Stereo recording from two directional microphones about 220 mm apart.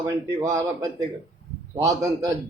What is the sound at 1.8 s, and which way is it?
Speech, 15° right (ahead or behind).